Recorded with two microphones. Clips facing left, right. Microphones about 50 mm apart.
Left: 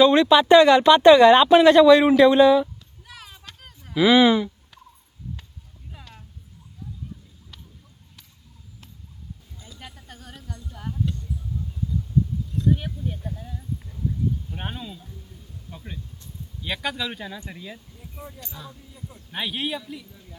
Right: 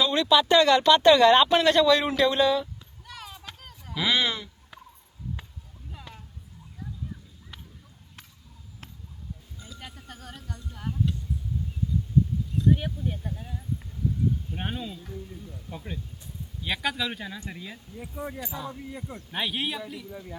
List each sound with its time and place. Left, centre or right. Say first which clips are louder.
0.0 s speech: left 7 dB; left; by 2.6 s centre
3.1 s a sound: right 2 dB; centre
3.8 s speech: left 10 dB; centre
6.0 s a sound: right 3 dB; centre
9.6 s a sound: left 1 dB; centre
12.5 s speech: even; centre
14.5 s speech: right 1 dB; centre
18.7 s speech: right 6 dB; right
19.3 s speech: left 2 dB; centre
20.1 s speech: right 9 dB; right